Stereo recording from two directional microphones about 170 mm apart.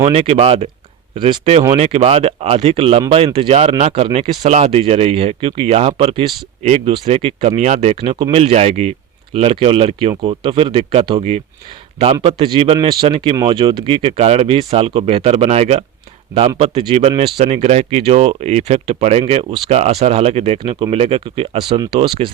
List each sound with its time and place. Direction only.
0.0 s speech: 35° right (ahead or behind)
8.1 s speech: 25° right (ahead or behind)
8.4 s speech: 40° right (ahead or behind)